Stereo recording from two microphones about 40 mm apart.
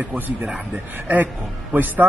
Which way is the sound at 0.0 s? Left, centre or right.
Right.